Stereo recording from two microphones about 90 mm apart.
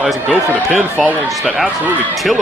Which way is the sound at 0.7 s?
15° right (ahead or behind).